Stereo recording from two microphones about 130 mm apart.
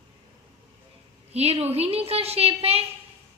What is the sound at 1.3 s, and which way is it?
A woman's voice, 50° right (ahead or behind).